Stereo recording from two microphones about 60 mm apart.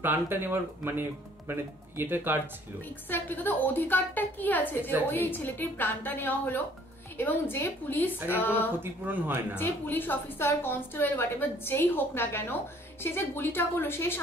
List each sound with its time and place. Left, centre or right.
0.0 s speech: right
3.1 s a woman's voice: left
7.5 s a woman's voice: left
8.3 s a woman's voice: left
9.0 s speech: right
9.6 s a woman's voice: left